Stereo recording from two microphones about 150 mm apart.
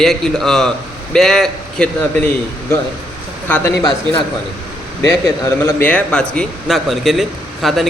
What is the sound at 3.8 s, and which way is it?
Speech, 30° left (ahead or behind).